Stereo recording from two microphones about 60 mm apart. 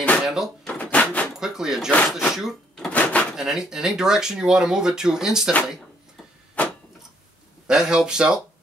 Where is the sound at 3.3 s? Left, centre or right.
Centre.